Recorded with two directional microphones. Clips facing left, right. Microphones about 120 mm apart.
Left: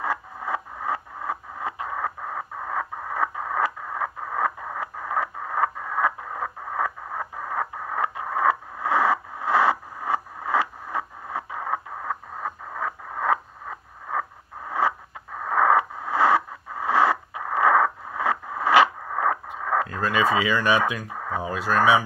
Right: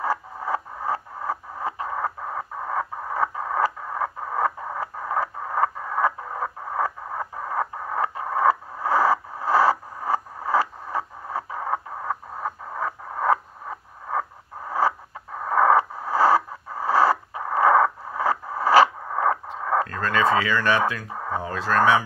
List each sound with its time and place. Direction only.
0.0 s radio: 35° right (ahead or behind)
14.7 s chicken: 35° right (ahead or behind)
15.4 s radio: 35° right (ahead or behind)
19.9 s speech: 10° left (ahead or behind)
21.1 s a sound: 35° right (ahead or behind)
21.4 s speech: 10° left (ahead or behind)